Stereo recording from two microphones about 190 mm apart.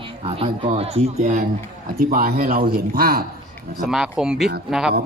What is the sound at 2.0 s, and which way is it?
Speech, 50° right (ahead or behind).